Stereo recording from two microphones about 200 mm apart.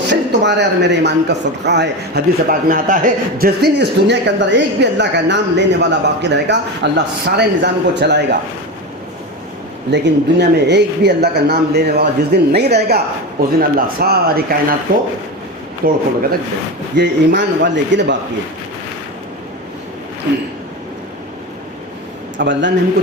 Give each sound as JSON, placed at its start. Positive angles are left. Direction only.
{"t": 0.1, "sound": "a man's voice", "side_deg": -60}
{"t": 9.9, "sound": "a man's voice", "side_deg": -60}
{"t": 15.8, "sound": "speech", "side_deg": -45}
{"t": 16.9, "sound": "a man's voice", "side_deg": -60}
{"t": 22.4, "sound": "a man's voice", "side_deg": -65}